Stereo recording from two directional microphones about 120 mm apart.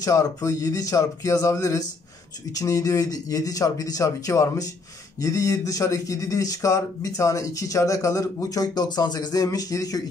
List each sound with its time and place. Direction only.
0.0 s speech: 30° left (ahead or behind)